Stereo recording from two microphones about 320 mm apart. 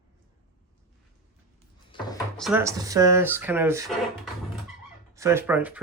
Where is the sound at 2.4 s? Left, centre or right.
Centre.